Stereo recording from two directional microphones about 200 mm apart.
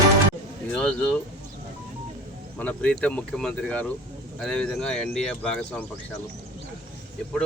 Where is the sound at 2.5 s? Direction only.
5° left (ahead or behind).